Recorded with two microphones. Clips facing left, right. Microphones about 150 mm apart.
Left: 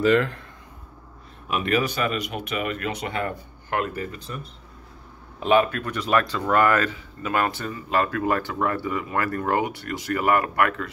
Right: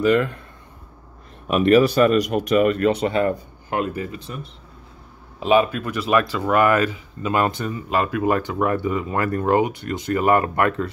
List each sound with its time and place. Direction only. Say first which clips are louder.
0.0 s speech: right 2 dB; 15° right (ahead or behind)
1.6 s speech: right 10 dB; 35° right (ahead or behind); by 4.4 s 15° right (ahead or behind)
5.5 s speech: right 2 dB; 10° right (ahead or behind); by 10.9 s 25° right (ahead or behind)